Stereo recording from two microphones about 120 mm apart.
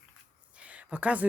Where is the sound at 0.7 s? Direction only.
10° right (ahead or behind).